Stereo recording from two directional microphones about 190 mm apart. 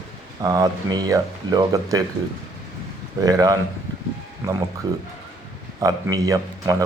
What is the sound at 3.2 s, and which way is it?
Speech, 20° right (ahead or behind).